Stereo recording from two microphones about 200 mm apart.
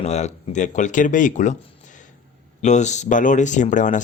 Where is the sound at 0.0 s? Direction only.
35° left (ahead or behind).